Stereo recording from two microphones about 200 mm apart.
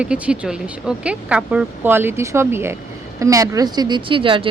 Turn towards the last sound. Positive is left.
turn(degrees=-25)  # may be behind; listen again after turning